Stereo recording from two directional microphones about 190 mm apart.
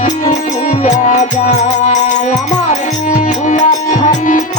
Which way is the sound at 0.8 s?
40° left (ahead or behind).